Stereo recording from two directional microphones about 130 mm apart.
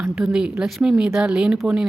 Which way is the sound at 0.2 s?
5° right (ahead or behind).